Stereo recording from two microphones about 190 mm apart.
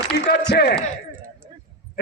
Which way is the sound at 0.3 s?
60° left (ahead or behind).